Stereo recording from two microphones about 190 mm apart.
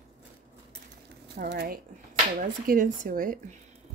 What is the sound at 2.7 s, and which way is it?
Speech, 45° right (ahead or behind).